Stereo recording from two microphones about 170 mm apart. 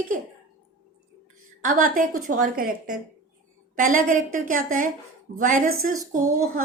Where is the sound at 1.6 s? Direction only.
55° right (ahead or behind).